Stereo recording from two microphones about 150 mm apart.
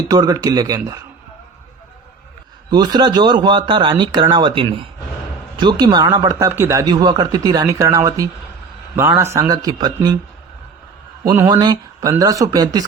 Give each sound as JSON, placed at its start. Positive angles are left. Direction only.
{"t": 0.1, "sound": "speech", "side_deg": -25}
{"t": 2.6, "sound": "speech", "side_deg": -25}
{"t": 11.3, "sound": "speech", "side_deg": -15}
{"t": 11.6, "sound": "speech", "side_deg": -25}